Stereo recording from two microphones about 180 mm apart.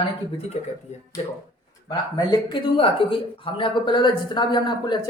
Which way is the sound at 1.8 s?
25° left (ahead or behind).